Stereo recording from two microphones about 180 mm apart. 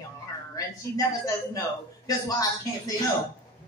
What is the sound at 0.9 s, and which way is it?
A man's voice, 20° left (ahead or behind).